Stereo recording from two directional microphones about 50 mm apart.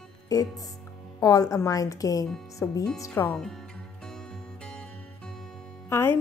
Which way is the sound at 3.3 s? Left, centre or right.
Centre.